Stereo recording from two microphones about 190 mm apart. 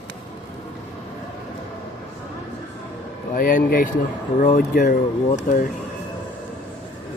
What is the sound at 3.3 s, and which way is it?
A man's voice, 45° left (ahead or behind).